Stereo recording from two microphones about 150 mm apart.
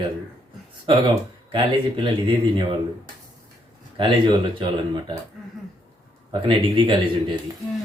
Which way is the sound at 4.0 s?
35° right (ahead or behind).